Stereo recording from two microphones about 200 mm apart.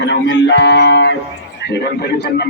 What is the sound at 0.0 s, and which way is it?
A man's voice, 60° left (ahead or behind).